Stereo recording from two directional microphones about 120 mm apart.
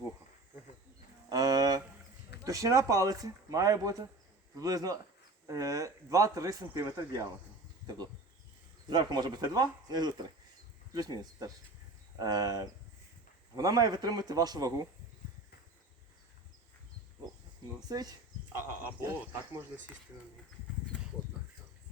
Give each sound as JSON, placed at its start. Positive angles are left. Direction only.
{"t": 1.3, "sound": "a sound", "side_deg": -30}
{"t": 2.4, "sound": "speech", "side_deg": -25}
{"t": 8.9, "sound": "speech", "side_deg": -35}
{"t": 11.2, "sound": "speech", "side_deg": -30}
{"t": 17.8, "sound": "speech", "side_deg": -35}
{"t": 18.5, "sound": "speech", "side_deg": -15}